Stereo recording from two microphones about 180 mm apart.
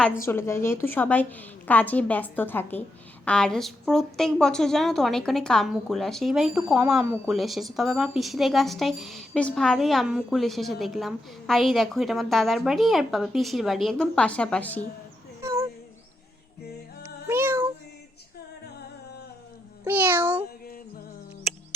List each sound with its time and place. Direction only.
0.2 s a woman's voice: 15° left (ahead or behind)
15.4 s a sound: 15° right (ahead or behind)
17.0 s cat: 15° right (ahead or behind)
19.8 s meow: 10° right (ahead or behind)
21.5 s music: centre (ahead or behind)